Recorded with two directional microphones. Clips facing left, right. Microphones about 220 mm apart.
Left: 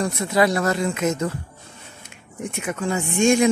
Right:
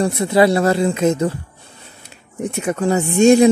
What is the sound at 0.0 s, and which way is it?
Speech, 30° right (ahead or behind).